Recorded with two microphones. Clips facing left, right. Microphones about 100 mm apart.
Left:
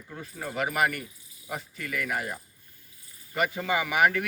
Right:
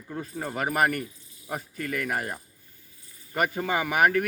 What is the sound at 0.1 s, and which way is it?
Speech, 30° right (ahead or behind).